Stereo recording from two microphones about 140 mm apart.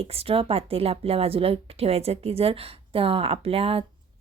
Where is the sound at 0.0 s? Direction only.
45° right (ahead or behind).